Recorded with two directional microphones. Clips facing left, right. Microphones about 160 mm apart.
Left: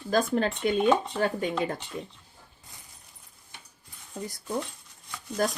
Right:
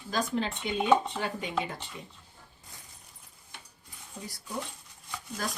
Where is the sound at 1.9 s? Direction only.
45° left (ahead or behind).